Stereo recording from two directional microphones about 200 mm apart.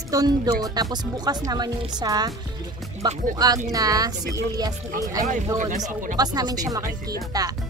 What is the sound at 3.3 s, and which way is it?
Speech, 20° right (ahead or behind).